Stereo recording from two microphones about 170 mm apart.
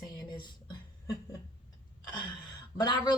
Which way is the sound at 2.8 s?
25° left (ahead or behind).